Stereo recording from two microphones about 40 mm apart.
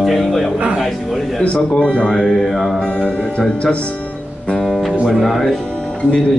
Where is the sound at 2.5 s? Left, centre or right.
Centre.